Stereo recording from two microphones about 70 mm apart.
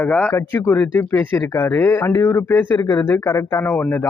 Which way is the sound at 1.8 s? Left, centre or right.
Left.